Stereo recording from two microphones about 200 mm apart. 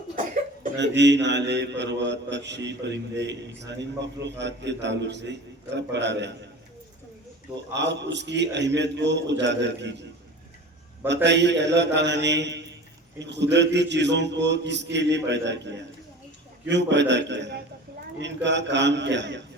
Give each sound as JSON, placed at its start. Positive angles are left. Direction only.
{"t": 0.8, "sound": "a man's voice", "side_deg": -60}
{"t": 7.8, "sound": "a man's voice", "side_deg": -60}
{"t": 11.1, "sound": "a man's voice", "side_deg": -60}